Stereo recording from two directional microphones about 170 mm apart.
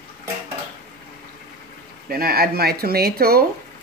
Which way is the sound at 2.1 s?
60° right (ahead or behind).